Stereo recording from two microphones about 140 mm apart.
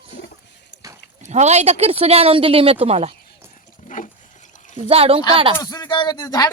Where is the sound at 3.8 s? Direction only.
70° left (ahead or behind).